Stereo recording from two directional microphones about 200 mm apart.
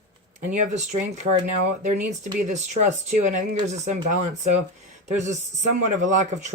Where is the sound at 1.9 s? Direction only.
35° right (ahead or behind).